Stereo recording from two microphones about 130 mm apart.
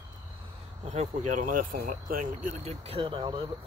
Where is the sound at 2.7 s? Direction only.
50° right (ahead or behind).